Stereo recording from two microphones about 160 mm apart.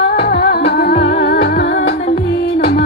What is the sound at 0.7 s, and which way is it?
Music, 80° left.